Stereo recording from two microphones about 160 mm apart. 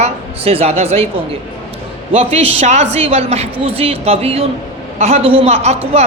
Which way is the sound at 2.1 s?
40° right (ahead or behind).